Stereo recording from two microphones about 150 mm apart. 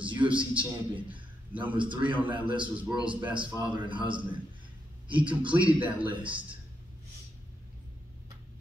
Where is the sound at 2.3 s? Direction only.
35° right (ahead or behind).